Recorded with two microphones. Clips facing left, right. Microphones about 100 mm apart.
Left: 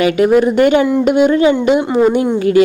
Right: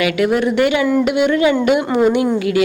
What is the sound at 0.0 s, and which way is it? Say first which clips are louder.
A woman's voice: left 5 dB; 35° left (ahead or behind).